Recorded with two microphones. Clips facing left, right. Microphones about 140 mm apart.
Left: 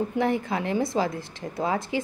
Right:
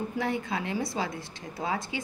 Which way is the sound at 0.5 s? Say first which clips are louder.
Left 5 dB; 35° left (ahead or behind).